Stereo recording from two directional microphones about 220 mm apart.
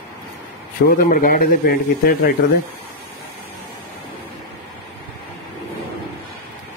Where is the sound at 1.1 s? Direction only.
40° left (ahead or behind).